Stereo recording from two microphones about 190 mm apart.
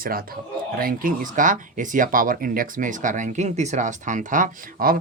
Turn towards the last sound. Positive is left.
turn(degrees=-45)  # may be behind; listen again after turning